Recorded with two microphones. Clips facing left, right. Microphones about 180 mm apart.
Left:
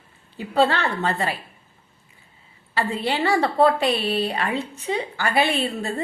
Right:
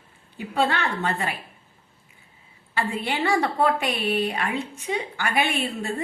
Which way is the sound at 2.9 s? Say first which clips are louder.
Left 2 dB; 35° left (ahead or behind).